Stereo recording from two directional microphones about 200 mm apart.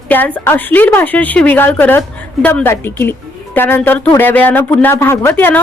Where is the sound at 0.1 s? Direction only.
10° left (ahead or behind).